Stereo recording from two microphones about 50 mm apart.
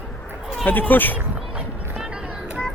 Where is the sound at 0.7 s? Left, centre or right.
Left.